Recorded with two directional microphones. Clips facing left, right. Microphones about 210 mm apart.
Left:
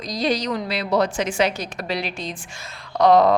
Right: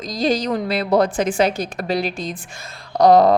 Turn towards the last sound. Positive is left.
turn(degrees=-35)  # may be behind; listen again after turning